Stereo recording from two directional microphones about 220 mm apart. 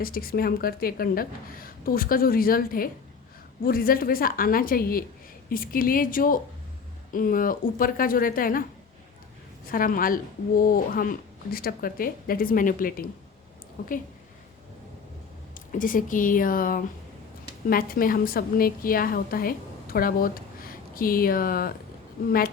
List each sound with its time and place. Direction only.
0.0 s speech: 40° left (ahead or behind)
9.6 s speech: 40° left (ahead or behind)
15.5 s a woman's voice: 40° left (ahead or behind)